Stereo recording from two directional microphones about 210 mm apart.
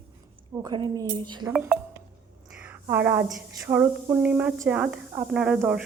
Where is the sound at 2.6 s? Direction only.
10° right (ahead or behind).